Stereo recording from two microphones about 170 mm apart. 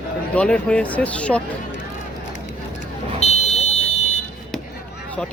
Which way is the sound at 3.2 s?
40° left (ahead or behind).